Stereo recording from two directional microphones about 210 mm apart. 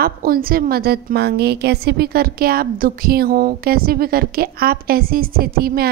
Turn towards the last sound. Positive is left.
turn(degrees=-45)  # may be behind; listen again after turning